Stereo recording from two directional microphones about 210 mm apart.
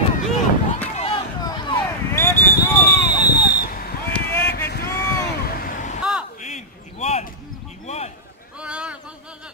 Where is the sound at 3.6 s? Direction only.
45° left (ahead or behind).